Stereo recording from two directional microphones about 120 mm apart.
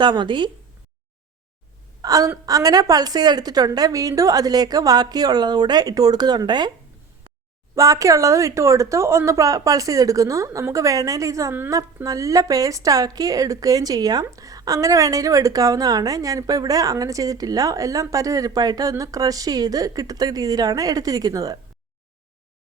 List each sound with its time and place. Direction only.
0.0 s a woman's voice: 40° right (ahead or behind)
2.0 s a woman's voice: 30° right (ahead or behind)
7.8 s a woman's voice: 25° right (ahead or behind)